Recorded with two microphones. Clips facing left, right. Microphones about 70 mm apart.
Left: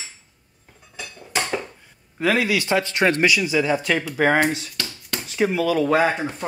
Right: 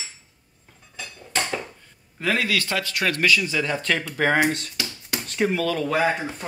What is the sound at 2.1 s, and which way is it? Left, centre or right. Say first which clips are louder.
Speech: left 3 dB; centre.